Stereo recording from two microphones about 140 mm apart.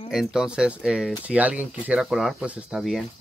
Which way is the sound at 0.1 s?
5° right (ahead or behind).